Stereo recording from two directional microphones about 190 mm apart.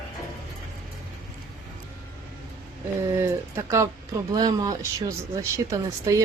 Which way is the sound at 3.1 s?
15° right (ahead or behind).